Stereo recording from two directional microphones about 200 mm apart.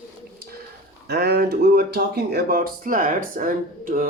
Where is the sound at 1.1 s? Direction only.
50° right (ahead or behind).